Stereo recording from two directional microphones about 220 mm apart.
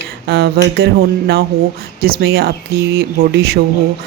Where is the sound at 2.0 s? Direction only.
45° right (ahead or behind).